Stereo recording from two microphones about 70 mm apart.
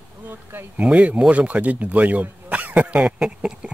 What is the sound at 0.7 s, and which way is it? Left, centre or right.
Speech, centre.